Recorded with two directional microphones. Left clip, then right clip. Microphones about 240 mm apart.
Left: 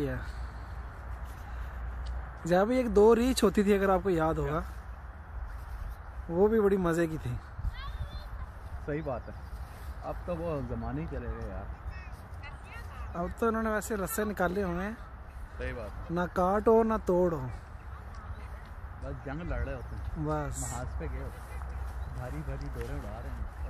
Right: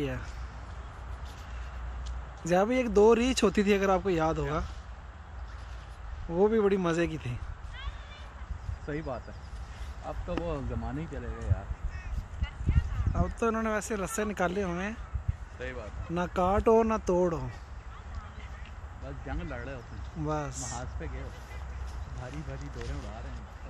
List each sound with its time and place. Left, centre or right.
2.4 s speech: centre
6.3 s speech: centre
8.8 s speech: left
13.1 s speech: centre
16.2 s speech: centre
19.2 s speech: left
20.2 s speech: centre
21.0 s speech: left
22.8 s speech: left